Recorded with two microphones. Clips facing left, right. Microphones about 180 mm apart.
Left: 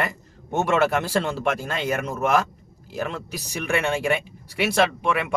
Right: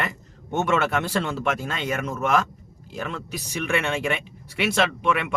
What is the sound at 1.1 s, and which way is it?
Speech, 35° left (ahead or behind).